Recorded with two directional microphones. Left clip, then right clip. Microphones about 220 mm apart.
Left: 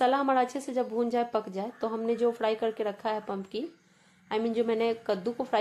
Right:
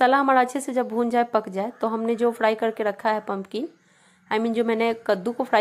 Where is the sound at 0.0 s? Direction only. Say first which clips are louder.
Right 7 dB; 25° right (ahead or behind).